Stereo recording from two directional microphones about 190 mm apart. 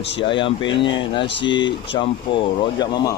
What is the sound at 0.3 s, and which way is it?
Speech, 25° left (ahead or behind).